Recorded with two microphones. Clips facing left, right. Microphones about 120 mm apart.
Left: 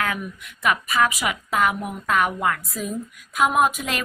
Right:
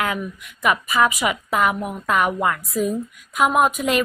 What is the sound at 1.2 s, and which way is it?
A woman's voice, centre (ahead or behind).